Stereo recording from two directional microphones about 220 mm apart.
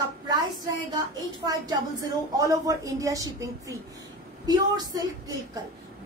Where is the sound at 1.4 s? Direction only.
15° right (ahead or behind).